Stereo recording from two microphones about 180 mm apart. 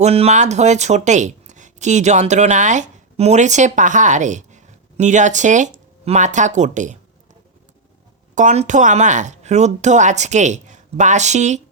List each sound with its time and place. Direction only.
0.0 s speech: 35° right (ahead or behind)
8.4 s speech: 45° right (ahead or behind)